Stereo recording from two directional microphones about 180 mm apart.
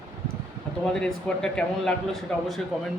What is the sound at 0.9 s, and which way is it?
Speech, 5° left (ahead or behind).